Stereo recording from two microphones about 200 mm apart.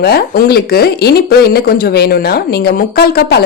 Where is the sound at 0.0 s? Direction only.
50° left (ahead or behind).